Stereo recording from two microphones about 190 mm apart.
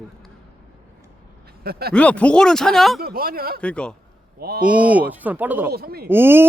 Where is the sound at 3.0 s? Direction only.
50° right (ahead or behind).